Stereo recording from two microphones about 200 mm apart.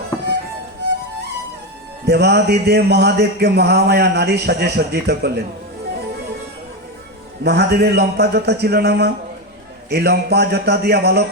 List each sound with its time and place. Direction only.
0.1 s music: 15° left (ahead or behind)
2.0 s speech: 55° right (ahead or behind)
7.4 s a man's voice: 55° right (ahead or behind)